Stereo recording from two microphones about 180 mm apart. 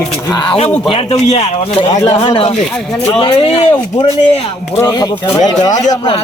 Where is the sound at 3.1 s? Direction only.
30° left (ahead or behind).